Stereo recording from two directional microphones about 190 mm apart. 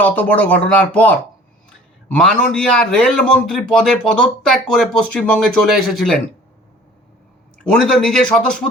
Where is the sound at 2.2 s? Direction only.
5° left (ahead or behind).